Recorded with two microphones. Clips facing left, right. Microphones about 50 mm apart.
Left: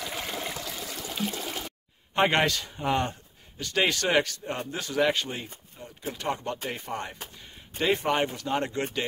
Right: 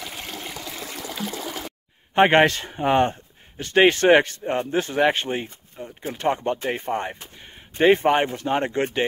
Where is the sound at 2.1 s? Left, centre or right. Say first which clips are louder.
Right 7 dB; right.